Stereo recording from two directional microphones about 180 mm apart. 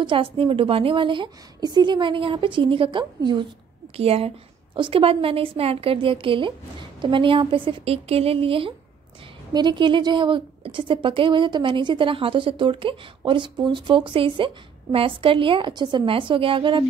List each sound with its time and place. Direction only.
0.0 s a woman's voice: 30° right (ahead or behind)